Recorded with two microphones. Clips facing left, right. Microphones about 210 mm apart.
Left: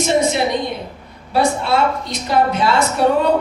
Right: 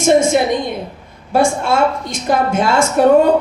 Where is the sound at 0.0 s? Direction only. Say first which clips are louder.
Right 4 dB; 50° right (ahead or behind).